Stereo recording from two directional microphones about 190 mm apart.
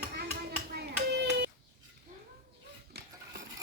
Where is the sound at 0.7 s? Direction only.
60° right (ahead or behind).